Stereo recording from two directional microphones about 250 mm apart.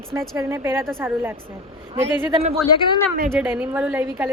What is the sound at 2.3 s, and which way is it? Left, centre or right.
Speech, right.